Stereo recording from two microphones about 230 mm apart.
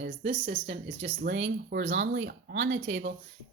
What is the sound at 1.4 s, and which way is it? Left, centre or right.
Speech, right.